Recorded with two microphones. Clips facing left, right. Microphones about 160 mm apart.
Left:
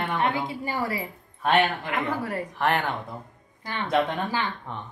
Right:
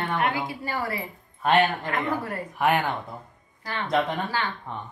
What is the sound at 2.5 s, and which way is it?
Speech, 10° right (ahead or behind).